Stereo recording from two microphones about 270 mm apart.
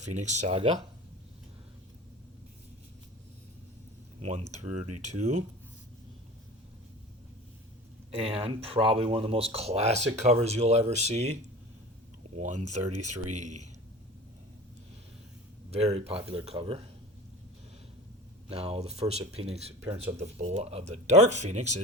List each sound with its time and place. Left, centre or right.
0.1 s speech: right
4.2 s speech: right
8.1 s speech: right
12.4 s speech: right
15.7 s speech: right
18.4 s speech: right